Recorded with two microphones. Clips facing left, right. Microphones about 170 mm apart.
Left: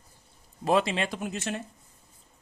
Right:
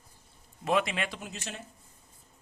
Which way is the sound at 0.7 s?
30° left (ahead or behind).